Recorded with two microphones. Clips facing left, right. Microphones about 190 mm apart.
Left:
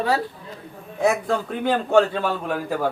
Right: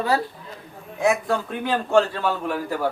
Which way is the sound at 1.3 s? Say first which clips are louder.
Left 2 dB; 55° left (ahead or behind).